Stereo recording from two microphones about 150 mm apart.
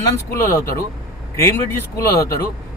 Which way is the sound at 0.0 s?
20° left (ahead or behind).